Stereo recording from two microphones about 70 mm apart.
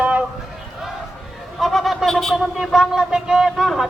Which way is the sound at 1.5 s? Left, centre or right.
Centre.